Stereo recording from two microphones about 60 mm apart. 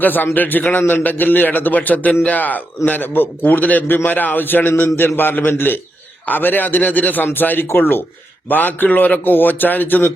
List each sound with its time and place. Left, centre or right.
0.0 s a man's voice: left